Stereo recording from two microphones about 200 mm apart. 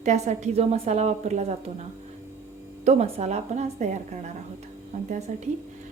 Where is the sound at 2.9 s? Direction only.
35° right (ahead or behind).